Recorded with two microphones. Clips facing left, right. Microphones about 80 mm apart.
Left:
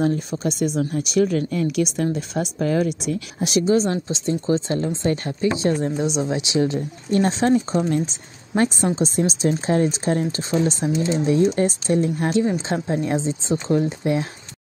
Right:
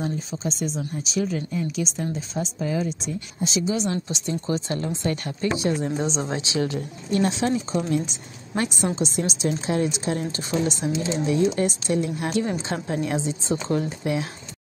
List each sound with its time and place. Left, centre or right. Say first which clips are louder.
0.0 s speech: left 7 dB; left
3.6 s a woman's voice: left 7 dB; left
4.1 s speech: left 5 dB; left
5.9 s speech: left 3 dB; centre
6.3 s speech: left 4 dB; left
7.1 s a woman's voice: left 4 dB; left